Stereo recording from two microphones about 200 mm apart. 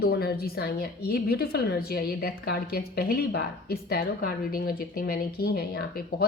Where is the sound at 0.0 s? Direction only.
50° left (ahead or behind).